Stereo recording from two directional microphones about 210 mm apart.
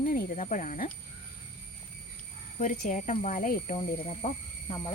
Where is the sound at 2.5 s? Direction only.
40° left (ahead or behind).